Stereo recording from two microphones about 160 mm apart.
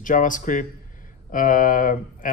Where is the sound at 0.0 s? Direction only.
55° left (ahead or behind).